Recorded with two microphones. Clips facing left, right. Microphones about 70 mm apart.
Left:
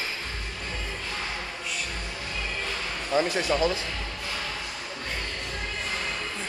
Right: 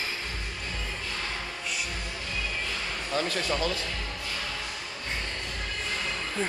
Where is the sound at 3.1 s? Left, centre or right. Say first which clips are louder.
Left 5 dB; centre.